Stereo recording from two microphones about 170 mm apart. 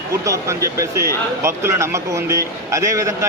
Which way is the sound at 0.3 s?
20° right (ahead or behind).